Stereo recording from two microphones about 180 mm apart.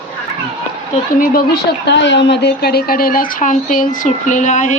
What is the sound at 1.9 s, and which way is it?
Speech, 75° left (ahead or behind).